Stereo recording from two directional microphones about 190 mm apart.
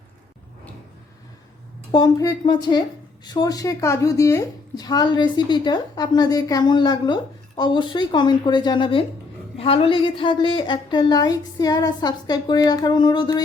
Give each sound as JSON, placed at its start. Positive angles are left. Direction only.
{"t": 1.9, "sound": "a woman's voice", "side_deg": 20}